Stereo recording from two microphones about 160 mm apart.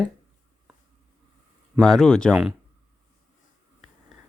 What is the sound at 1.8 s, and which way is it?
Speech, 5° left (ahead or behind).